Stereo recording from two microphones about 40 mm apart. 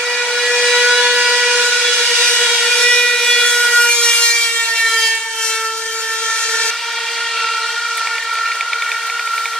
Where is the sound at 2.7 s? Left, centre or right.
Centre.